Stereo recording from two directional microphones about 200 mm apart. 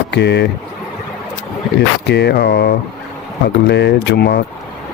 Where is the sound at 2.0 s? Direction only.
55° left (ahead or behind).